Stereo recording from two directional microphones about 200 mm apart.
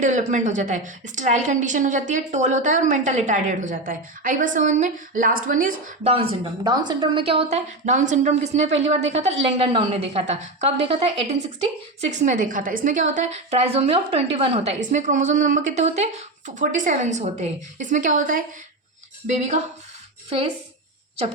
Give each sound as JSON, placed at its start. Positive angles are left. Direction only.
{"t": 0.0, "sound": "a woman's voice", "side_deg": -35}
{"t": 7.5, "sound": "a woman's voice", "side_deg": -40}